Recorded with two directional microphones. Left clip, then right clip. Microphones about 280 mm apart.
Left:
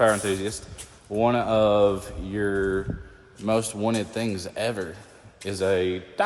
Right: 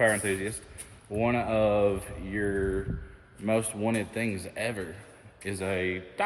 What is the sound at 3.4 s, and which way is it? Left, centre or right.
A man's voice, centre.